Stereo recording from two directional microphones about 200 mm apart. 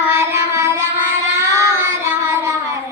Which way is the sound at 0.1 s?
10° right (ahead or behind).